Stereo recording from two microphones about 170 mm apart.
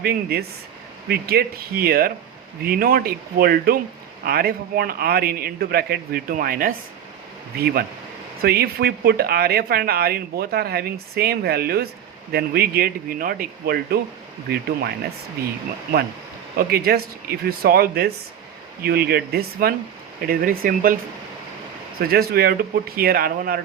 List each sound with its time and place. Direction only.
0.0 s speech: 65° right (ahead or behind)
16.6 s speech: 65° right (ahead or behind)
21.9 s speech: 65° right (ahead or behind)